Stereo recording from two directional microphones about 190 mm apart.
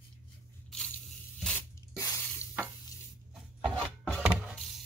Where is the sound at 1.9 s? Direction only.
15° left (ahead or behind).